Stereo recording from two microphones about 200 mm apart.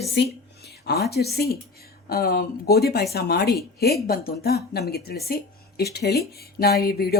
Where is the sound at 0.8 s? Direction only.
55° left (ahead or behind).